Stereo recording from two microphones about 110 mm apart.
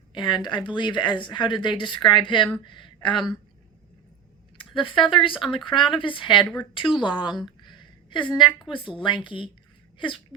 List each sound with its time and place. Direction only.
0.1 s speech: 45° left (ahead or behind)
4.5 s a woman's voice: 50° left (ahead or behind)